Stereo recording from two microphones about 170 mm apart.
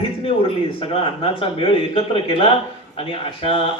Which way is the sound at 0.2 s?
35° left (ahead or behind).